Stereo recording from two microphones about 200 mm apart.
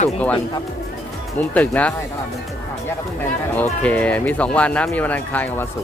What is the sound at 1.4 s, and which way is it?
Speech, 10° left (ahead or behind).